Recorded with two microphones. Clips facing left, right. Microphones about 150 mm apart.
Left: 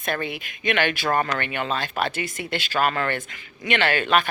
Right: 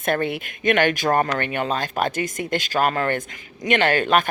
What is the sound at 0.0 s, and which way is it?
Speech, 55° right (ahead or behind).